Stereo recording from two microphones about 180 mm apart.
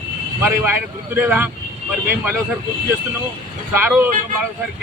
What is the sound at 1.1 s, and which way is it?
Speech, 10° right (ahead or behind).